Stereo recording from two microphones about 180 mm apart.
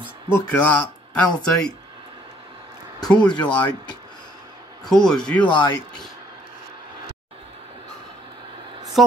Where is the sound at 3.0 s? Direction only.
25° left (ahead or behind).